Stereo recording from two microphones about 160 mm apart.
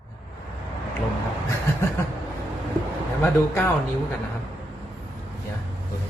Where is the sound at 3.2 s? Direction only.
15° left (ahead or behind).